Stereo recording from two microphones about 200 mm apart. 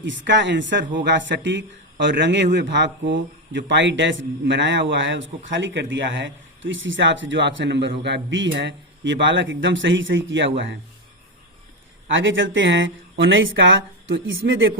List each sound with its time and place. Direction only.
0.0 s speech: 65° right (ahead or behind)
12.1 s speech: 70° right (ahead or behind)